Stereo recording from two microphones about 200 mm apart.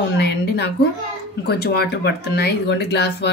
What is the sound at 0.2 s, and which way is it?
Speech, 55° left (ahead or behind).